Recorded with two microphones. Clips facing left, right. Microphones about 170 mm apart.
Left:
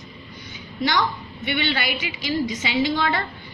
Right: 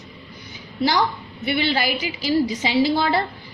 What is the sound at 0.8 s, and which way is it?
A woman's voice, 35° right (ahead or behind).